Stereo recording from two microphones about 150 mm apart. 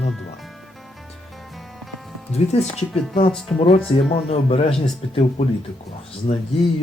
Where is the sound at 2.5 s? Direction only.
45° left (ahead or behind).